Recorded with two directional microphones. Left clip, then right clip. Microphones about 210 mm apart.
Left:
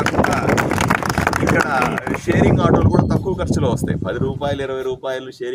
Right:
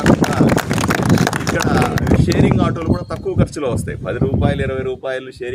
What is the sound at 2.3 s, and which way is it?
Speech, centre (ahead or behind).